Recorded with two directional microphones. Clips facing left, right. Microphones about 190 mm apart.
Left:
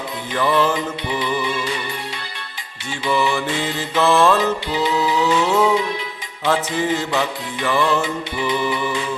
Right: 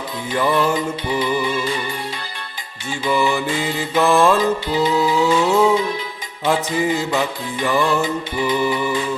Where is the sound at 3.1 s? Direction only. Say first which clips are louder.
Right 1 dB; 10° right (ahead or behind).